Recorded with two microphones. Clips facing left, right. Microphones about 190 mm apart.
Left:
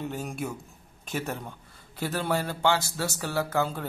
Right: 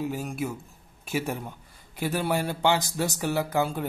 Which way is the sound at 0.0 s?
5° right (ahead or behind).